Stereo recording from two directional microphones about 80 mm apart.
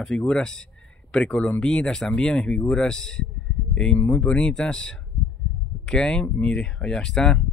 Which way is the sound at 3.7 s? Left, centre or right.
Centre.